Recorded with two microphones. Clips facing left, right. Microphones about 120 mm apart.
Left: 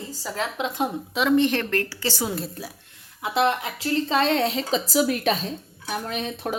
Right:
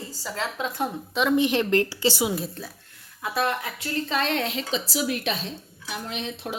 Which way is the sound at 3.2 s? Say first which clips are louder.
Left 4 dB; 25° left (ahead or behind).